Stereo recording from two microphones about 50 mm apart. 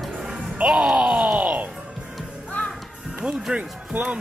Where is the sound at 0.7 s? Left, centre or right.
Centre.